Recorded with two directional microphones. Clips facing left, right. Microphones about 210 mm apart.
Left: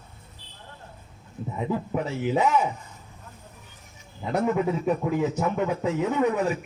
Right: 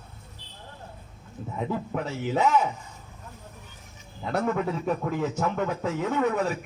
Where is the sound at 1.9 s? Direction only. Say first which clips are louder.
Left 4 dB; 10° left (ahead or behind).